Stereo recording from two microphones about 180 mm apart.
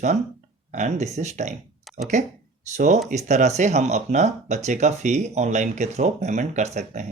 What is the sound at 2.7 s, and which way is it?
Speech, 40° right (ahead or behind).